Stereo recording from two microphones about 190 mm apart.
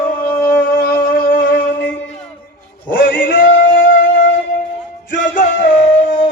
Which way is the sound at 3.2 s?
45° left (ahead or behind).